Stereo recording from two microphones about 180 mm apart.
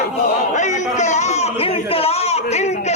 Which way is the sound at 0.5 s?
40° left (ahead or behind).